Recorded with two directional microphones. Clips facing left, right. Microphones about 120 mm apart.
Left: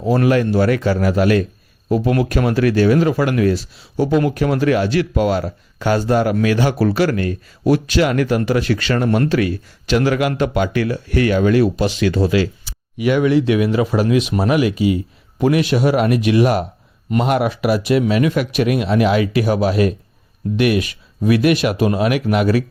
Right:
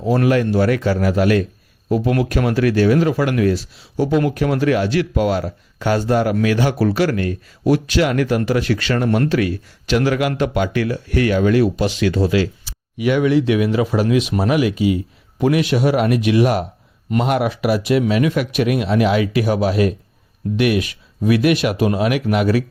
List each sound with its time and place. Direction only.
0.0 s speech: 35° left (ahead or behind)